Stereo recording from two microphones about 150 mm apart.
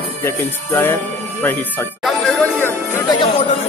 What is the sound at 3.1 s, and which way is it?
Speech, 35° left (ahead or behind).